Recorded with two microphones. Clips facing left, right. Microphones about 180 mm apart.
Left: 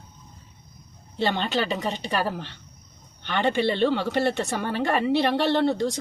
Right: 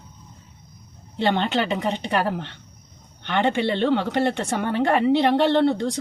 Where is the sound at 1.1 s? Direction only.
20° right (ahead or behind).